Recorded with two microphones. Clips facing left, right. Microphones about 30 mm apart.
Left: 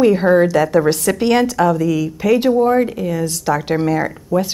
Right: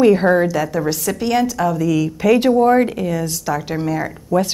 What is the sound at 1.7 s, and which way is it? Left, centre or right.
Speech, centre.